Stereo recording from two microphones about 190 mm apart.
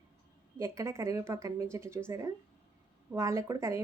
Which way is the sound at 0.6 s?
15° right (ahead or behind).